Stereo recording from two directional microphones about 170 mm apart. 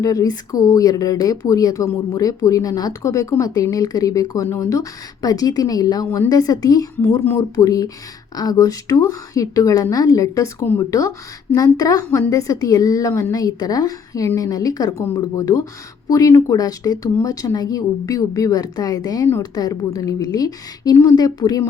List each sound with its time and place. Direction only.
0.0 s speech: 20° left (ahead or behind)